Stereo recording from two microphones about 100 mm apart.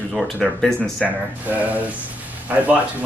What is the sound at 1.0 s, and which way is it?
Speech, 15° right (ahead or behind).